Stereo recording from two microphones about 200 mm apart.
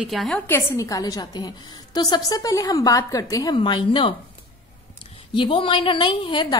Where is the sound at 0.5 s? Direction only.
15° left (ahead or behind).